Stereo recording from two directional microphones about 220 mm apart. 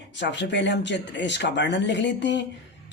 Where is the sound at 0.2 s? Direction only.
55° left (ahead or behind).